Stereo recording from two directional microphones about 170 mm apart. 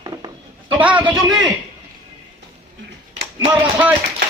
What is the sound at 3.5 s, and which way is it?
Speech, 10° right (ahead or behind).